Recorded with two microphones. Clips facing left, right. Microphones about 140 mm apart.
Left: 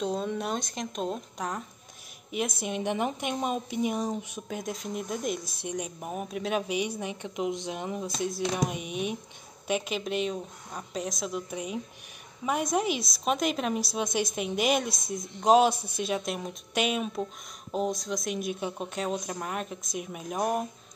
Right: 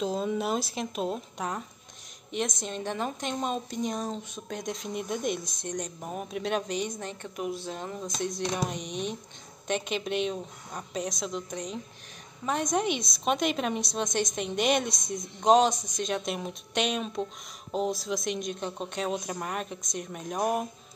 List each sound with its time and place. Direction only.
0.0 s a woman's voice: centre (ahead or behind)